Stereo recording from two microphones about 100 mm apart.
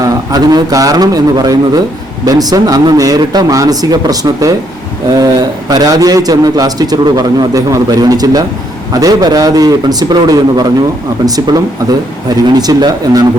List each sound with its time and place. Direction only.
0.0 s a man's voice: 40° right (ahead or behind)